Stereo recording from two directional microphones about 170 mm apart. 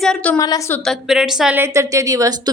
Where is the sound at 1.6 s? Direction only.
20° right (ahead or behind).